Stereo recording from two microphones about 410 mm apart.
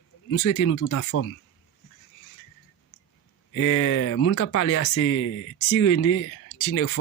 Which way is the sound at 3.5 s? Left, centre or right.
Left.